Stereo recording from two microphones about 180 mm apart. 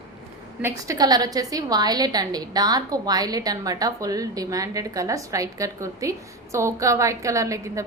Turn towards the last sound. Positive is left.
turn(degrees=-15)  # may be behind; listen again after turning